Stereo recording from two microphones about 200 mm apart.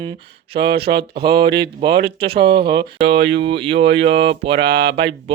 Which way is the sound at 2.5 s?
25° right (ahead or behind).